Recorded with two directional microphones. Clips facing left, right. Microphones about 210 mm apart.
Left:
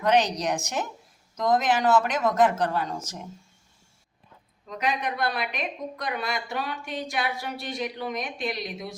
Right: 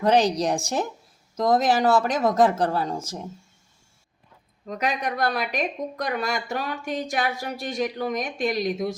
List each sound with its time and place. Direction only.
0.0 s speech: 35° right (ahead or behind)
4.6 s speech: 45° right (ahead or behind)